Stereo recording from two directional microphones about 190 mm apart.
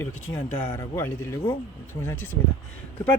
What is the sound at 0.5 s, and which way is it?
Speech, 10° left (ahead or behind).